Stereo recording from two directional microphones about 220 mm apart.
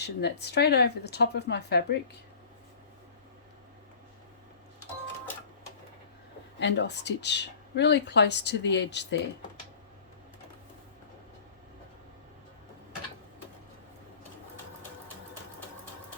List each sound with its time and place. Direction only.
0.0 s speech: 50° left (ahead or behind)
6.6 s speech: 55° left (ahead or behind)